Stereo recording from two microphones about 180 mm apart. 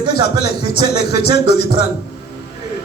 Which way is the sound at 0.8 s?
65° left (ahead or behind).